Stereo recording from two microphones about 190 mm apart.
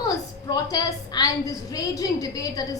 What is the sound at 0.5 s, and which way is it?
A woman's voice, 20° left (ahead or behind).